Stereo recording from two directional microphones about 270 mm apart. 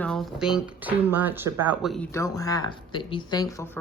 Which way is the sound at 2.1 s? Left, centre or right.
Centre.